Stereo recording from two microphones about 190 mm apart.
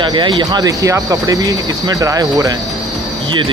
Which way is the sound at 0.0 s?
25° right (ahead or behind).